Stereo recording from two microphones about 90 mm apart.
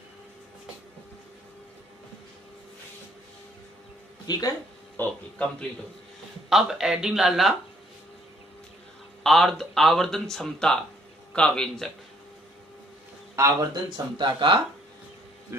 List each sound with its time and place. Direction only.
4.3 s speech: 45° left (ahead or behind)
4.9 s speech: 15° left (ahead or behind)
6.5 s speech: 5° right (ahead or behind)
9.2 s speech: centre (ahead or behind)
13.4 s speech: 35° right (ahead or behind)
14.1 s speech: 60° right (ahead or behind)